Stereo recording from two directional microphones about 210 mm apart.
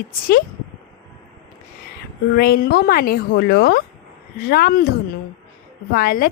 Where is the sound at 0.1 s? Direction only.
45° left (ahead or behind).